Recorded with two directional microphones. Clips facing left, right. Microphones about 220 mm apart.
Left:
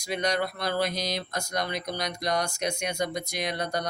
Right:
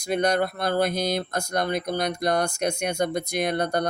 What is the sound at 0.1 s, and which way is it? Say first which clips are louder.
Speech: right 5 dB; 50° right (ahead or behind).